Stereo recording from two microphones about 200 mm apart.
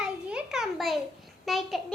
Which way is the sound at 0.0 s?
5° right (ahead or behind).